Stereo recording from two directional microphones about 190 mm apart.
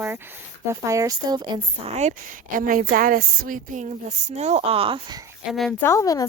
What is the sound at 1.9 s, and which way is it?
Speech, 35° right (ahead or behind).